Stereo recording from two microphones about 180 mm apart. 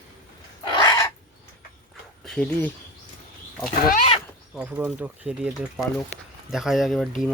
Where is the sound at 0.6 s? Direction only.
25° left (ahead or behind).